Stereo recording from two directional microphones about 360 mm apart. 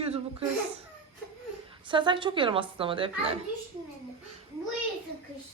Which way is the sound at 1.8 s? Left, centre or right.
Centre.